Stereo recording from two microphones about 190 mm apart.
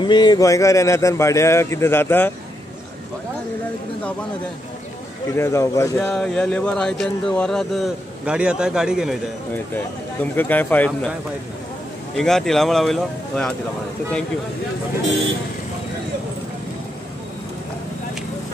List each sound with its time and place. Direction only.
0.0 s speech: 25° left (ahead or behind)
5.3 s speech: 15° left (ahead or behind); by 9.2 s 5° right (ahead or behind)
10.3 s speech: 10° left (ahead or behind)
12.2 s speech: centre (ahead or behind)